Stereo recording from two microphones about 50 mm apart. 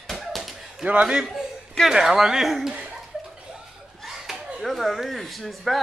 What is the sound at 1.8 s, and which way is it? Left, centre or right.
Speech, centre.